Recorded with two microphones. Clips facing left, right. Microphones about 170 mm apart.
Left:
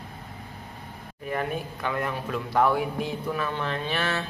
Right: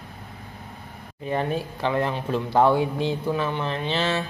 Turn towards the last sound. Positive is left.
turn(degrees=-20)  # may be behind; listen again after turning